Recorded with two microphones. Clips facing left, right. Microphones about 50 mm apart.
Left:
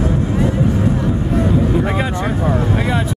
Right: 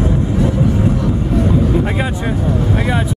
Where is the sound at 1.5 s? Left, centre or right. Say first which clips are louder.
Right 1 dB; centre.